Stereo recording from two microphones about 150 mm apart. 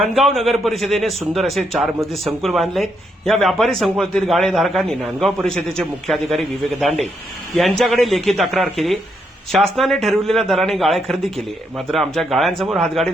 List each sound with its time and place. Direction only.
0.0 s a man's voice: centre (ahead or behind)